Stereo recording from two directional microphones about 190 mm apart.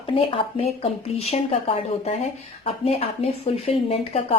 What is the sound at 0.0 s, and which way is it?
Speech, 30° left (ahead or behind).